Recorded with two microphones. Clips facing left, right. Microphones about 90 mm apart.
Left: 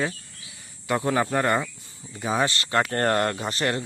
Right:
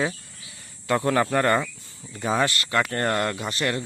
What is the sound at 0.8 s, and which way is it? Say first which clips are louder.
Speech: right 2 dB; 15° left (ahead or behind).